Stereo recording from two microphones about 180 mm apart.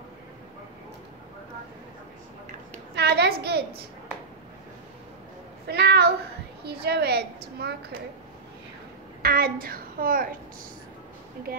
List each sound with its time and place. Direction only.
2.9 s a child's voice: 65° right (ahead or behind)
5.7 s a woman's voice: 65° right (ahead or behind)
9.2 s a child's voice: 55° right (ahead or behind)
11.5 s speech: 55° right (ahead or behind)